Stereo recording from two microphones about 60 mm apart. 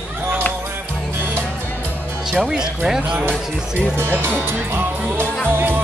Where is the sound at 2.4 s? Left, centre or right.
Centre.